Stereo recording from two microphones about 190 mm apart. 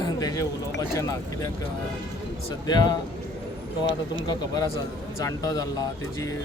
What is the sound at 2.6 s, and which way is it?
Speech, 20° left (ahead or behind).